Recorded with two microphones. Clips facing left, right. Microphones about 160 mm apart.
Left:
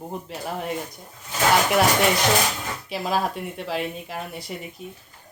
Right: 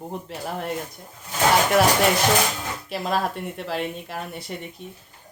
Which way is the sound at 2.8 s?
Centre (ahead or behind).